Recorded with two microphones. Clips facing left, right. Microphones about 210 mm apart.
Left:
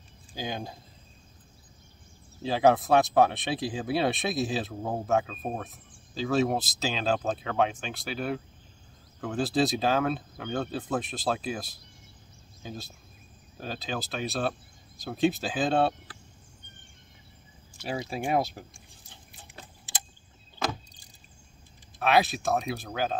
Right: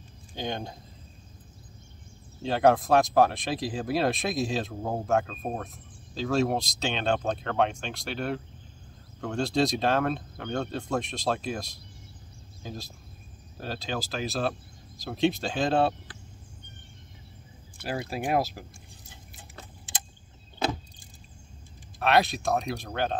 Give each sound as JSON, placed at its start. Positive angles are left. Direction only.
{"t": 0.3, "sound": "speech", "side_deg": 5}
{"t": 2.4, "sound": "speech", "side_deg": 0}
{"t": 17.8, "sound": "speech", "side_deg": -55}
{"t": 18.1, "sound": "speech", "side_deg": 0}
{"t": 22.0, "sound": "speech", "side_deg": 0}